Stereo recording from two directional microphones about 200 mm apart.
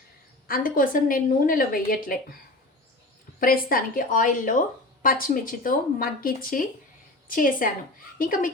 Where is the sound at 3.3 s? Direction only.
45° left (ahead or behind).